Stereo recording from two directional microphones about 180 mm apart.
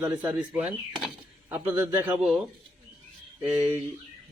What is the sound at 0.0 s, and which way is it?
Speech, 10° right (ahead or behind).